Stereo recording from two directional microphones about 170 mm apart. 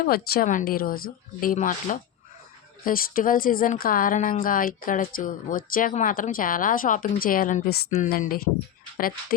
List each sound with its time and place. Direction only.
0.0 s speech: 60° left (ahead or behind)
7.9 s speech: 50° left (ahead or behind)